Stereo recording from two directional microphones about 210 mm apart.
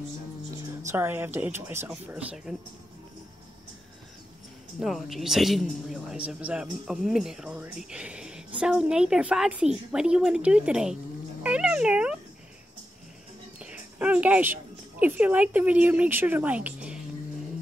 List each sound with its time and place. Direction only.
0.8 s speech: 10° right (ahead or behind)
4.7 s a man's voice: centre (ahead or behind)
13.6 s a woman's voice: 5° right (ahead or behind)